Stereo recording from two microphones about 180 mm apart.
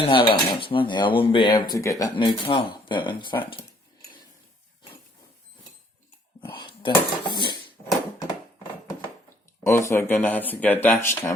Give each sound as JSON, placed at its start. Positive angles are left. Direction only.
{"t": 0.0, "sound": "dishes", "side_deg": 25}
{"t": 6.6, "sound": "speech", "side_deg": 25}
{"t": 9.6, "sound": "speech", "side_deg": 15}